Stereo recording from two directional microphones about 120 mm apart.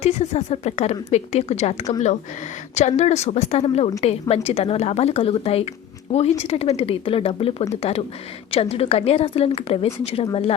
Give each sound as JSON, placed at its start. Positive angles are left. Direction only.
{"t": 0.0, "sound": "a woman's voice", "side_deg": 65}
{"t": 4.0, "sound": "a woman's voice", "side_deg": 60}